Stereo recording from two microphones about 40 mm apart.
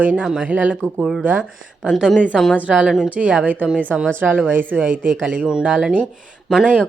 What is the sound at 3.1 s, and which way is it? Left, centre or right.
Speech, right.